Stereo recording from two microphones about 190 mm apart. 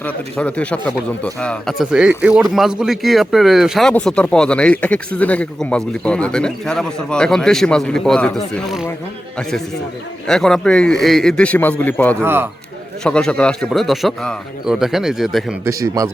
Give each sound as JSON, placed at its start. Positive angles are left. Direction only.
{"t": 0.0, "sound": "speech", "side_deg": 5}
{"t": 10.2, "sound": "speech", "side_deg": 5}
{"t": 12.2, "sound": "speech", "side_deg": -10}
{"t": 13.1, "sound": "speech", "side_deg": 5}
{"t": 15.6, "sound": "speech", "side_deg": -15}